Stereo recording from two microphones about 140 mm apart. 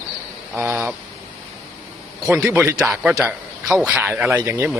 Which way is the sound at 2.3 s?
10° right (ahead or behind).